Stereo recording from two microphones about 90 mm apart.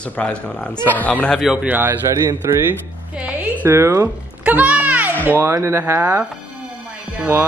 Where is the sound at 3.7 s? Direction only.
30° right (ahead or behind).